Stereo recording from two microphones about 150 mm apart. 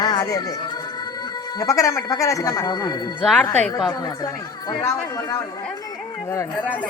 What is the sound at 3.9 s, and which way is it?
Speech, 25° left (ahead or behind).